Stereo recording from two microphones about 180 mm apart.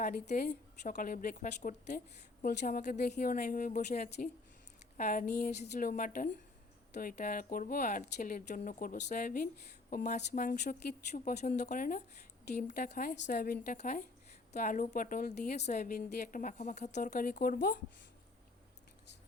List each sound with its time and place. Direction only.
0.0 s speech: 45° left (ahead or behind)